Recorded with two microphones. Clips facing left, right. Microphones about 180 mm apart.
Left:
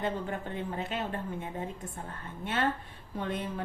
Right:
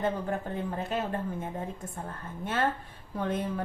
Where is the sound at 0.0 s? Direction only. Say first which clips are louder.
Right 3 dB; 40° right (ahead or behind).